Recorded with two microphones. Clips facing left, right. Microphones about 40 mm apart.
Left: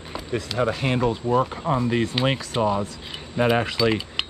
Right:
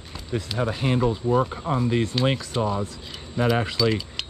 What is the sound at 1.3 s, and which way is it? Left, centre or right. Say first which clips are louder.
Speech: left 1 dB; left.